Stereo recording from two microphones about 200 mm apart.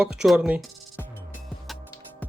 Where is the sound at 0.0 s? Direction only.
5° right (ahead or behind).